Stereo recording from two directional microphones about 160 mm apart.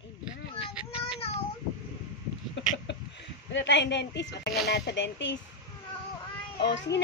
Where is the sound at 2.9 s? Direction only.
90° left.